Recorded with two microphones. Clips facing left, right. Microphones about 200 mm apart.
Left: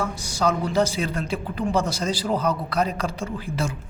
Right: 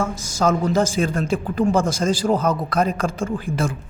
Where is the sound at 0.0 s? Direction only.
45° right (ahead or behind).